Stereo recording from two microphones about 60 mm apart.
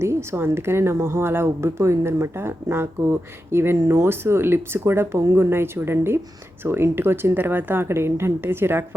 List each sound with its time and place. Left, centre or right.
0.0 s a woman's voice: right
1.8 s a woman's voice: right